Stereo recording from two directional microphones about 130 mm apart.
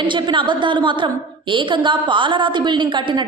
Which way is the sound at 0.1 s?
35° right (ahead or behind).